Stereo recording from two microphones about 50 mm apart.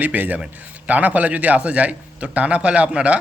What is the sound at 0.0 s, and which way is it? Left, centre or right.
A man's voice, right.